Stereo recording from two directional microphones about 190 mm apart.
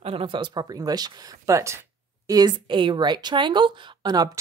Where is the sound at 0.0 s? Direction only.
30° right (ahead or behind).